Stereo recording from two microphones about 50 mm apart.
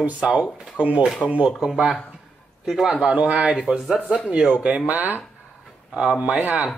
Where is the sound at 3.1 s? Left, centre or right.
Right.